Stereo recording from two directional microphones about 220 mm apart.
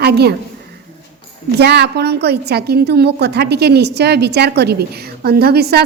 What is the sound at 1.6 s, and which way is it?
A woman's voice, 50° right (ahead or behind).